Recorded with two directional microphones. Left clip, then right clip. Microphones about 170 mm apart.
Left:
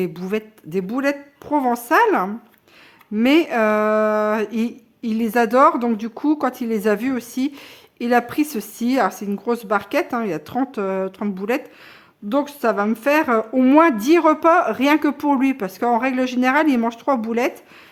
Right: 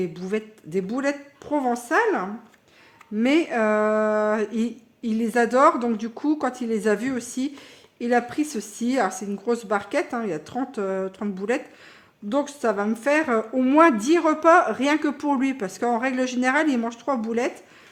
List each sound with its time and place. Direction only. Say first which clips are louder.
0.0 s speech: left 3 dB; 40° left (ahead or behind)
3.2 s speech: left 5 dB; 30° left (ahead or behind)